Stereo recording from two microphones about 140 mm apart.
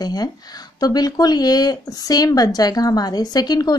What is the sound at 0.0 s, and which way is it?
Speech, 30° left (ahead or behind).